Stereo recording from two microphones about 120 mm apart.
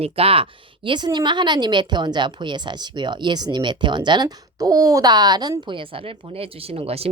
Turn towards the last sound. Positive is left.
turn(degrees=-55)  # may be behind; listen again after turning